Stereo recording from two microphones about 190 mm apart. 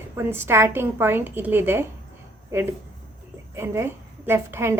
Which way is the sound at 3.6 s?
15° right (ahead or behind).